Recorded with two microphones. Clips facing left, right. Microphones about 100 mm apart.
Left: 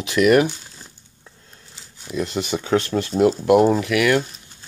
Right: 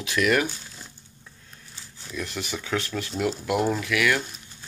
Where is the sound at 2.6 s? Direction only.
30° left (ahead or behind).